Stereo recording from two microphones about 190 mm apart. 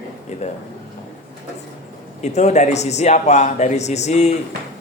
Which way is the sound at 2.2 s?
35° left (ahead or behind).